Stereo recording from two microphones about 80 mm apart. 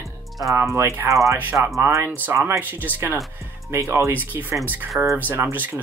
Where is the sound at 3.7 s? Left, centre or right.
Right.